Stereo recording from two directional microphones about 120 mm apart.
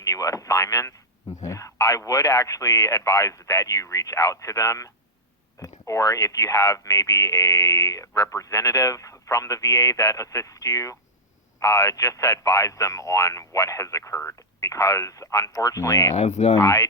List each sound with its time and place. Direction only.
0.0 s speech: 25° left (ahead or behind)
16.1 s speech: 60° left (ahead or behind)
16.6 s speech: 25° left (ahead or behind)